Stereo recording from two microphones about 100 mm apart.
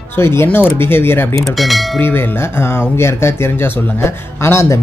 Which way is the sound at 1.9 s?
20° left (ahead or behind).